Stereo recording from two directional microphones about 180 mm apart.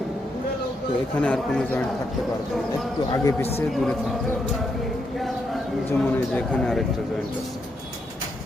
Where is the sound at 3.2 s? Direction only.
15° left (ahead or behind).